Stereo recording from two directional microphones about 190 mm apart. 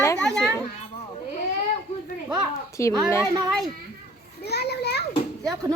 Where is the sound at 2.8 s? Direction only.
15° left (ahead or behind).